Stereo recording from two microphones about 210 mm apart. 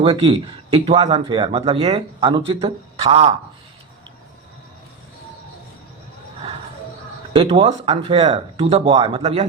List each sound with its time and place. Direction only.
0.0 s speech: 25° right (ahead or behind)
7.3 s speech: 25° right (ahead or behind)